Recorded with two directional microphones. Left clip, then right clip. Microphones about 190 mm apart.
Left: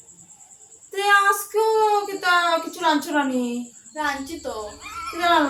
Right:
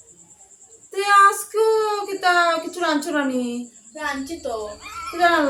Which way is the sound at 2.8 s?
20° left (ahead or behind).